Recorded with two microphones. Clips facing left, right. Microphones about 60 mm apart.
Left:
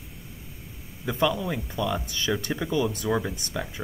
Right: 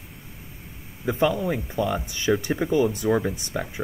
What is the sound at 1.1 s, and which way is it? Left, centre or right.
Speech, right.